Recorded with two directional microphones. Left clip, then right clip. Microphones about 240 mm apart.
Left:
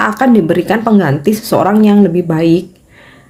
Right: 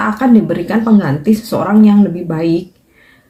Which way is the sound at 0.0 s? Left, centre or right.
Left.